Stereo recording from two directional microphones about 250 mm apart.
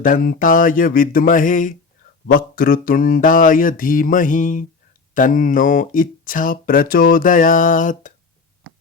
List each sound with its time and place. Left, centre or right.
0.0 s speech: left